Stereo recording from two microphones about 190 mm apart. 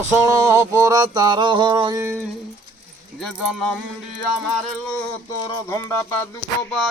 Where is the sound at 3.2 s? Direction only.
Centre (ahead or behind).